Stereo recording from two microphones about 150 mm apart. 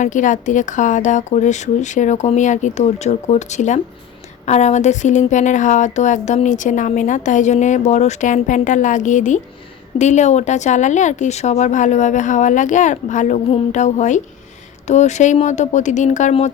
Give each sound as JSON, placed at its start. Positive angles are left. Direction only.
{"t": 0.0, "sound": "speech", "side_deg": 55}